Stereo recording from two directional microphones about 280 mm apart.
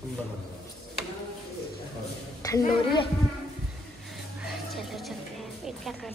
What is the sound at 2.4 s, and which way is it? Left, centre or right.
Speech, centre.